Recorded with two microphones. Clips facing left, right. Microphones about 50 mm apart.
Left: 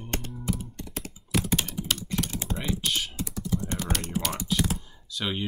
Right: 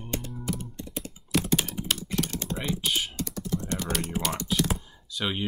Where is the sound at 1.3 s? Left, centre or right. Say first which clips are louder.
Right 1 dB; centre.